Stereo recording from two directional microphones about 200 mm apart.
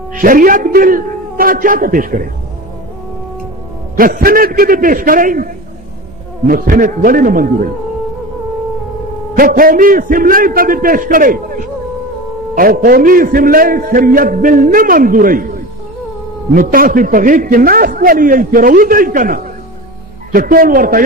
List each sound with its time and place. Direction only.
0.1 s a man's voice: 45° right (ahead or behind)
3.9 s a man's voice: 45° right (ahead or behind)
6.5 s a man's voice: 45° right (ahead or behind)
9.3 s a man's voice: 45° right (ahead or behind)